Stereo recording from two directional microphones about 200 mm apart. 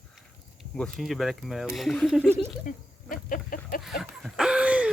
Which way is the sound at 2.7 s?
45° left (ahead or behind).